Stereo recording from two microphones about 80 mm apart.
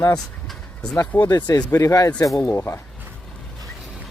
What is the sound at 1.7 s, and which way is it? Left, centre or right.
Speech, left.